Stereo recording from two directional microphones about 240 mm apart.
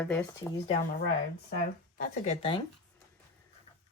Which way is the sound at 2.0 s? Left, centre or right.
Left.